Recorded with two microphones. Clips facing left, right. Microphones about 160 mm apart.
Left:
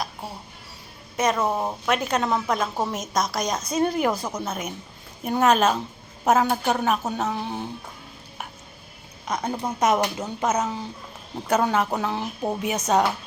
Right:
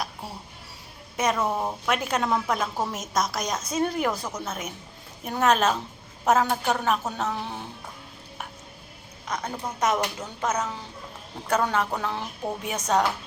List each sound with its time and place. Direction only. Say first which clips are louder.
1.1 s speech: left 2 dB; 10° right (ahead or behind)
1.4 s a woman's voice: left 2 dB; 10° left (ahead or behind)
1.9 s a woman's voice: left 2 dB; 5° right (ahead or behind); by 7.6 s 15° left (ahead or behind)
9.3 s a woman's voice: left 4 dB; 20° left (ahead or behind)